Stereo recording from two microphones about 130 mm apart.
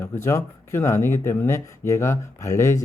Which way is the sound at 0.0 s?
20° left (ahead or behind).